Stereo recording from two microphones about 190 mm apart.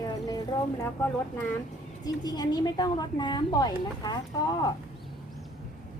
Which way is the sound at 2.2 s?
20° left (ahead or behind).